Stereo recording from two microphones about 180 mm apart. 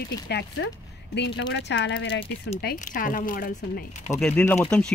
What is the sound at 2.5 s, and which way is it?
Speech, 50° left (ahead or behind).